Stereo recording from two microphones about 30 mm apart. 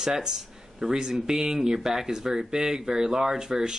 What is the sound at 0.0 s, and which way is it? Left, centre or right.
Speech, centre.